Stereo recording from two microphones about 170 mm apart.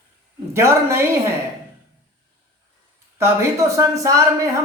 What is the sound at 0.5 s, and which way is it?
Speech, 15° right (ahead or behind).